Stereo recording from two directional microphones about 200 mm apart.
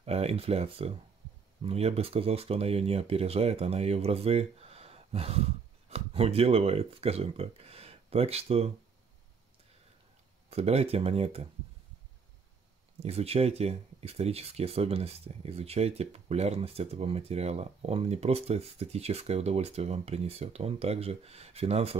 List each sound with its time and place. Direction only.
0.0 s speech: 30° right (ahead or behind)
10.5 s speech: 30° right (ahead or behind)
13.0 s speech: 30° right (ahead or behind)